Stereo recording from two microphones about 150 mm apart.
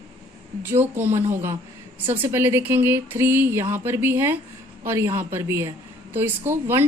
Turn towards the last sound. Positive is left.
turn(degrees=-15)  # may be behind; listen again after turning